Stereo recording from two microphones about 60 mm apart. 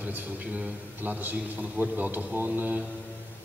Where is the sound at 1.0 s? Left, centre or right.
Right.